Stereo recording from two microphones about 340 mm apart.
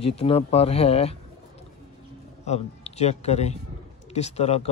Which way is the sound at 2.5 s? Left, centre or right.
Centre.